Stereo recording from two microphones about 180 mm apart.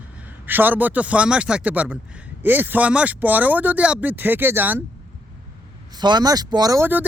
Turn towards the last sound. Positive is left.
turn(degrees=-15)  # may be behind; listen again after turning